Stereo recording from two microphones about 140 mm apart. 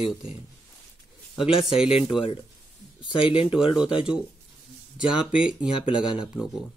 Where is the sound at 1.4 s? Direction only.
5° right (ahead or behind).